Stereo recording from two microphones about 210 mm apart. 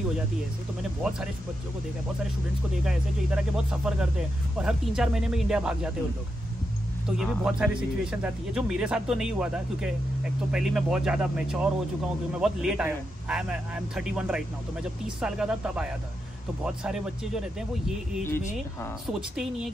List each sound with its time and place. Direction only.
2.8 s a man's voice: 5° right (ahead or behind)
7.1 s a man's voice: 5° right (ahead or behind)